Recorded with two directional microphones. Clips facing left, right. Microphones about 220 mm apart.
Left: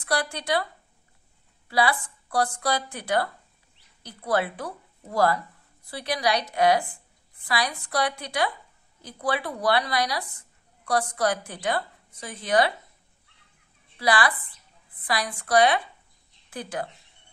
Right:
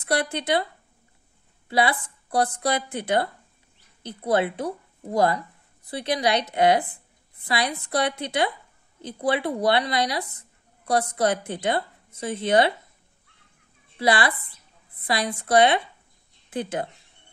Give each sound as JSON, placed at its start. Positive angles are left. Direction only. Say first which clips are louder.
{"t": 0.0, "sound": "a woman's voice", "louder": "right 3 dB", "side_deg": -25}
{"t": 1.7, "sound": "a woman's voice", "louder": "right 1 dB", "side_deg": -20}
{"t": 13.9, "sound": "a woman's voice", "louder": "right 2 dB", "side_deg": -25}